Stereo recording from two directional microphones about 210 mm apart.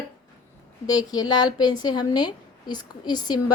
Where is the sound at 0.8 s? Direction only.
20° left (ahead or behind).